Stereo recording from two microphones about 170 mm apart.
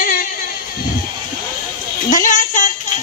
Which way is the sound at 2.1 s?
50° left (ahead or behind).